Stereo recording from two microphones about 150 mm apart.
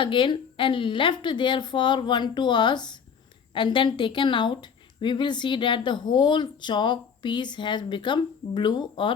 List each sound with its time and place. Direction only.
0.0 s a woman's voice: 35° left (ahead or behind)